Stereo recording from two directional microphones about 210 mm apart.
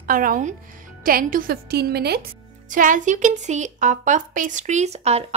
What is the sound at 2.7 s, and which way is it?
A woman's voice, 40° right (ahead or behind).